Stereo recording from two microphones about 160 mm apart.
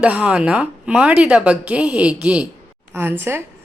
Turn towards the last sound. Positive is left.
turn(degrees=-15)  # may be behind; listen again after turning